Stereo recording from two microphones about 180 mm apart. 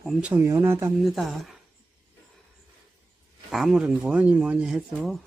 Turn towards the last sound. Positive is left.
turn(degrees=0)  # may be behind; listen again after turning